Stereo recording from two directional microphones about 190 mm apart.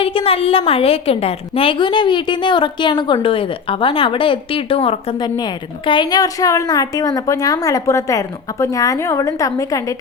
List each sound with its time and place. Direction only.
0.0 s a woman's voice: 30° left (ahead or behind)